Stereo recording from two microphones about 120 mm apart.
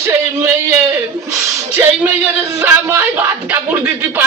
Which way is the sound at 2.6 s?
20° right (ahead or behind).